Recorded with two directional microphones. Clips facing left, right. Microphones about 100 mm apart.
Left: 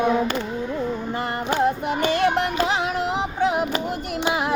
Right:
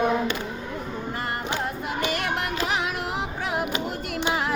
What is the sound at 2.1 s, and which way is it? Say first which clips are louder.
Music: left 7 dB; 30° left (ahead or behind).